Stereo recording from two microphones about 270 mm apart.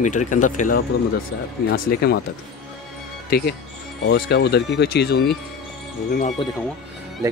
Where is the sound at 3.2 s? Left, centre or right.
Left.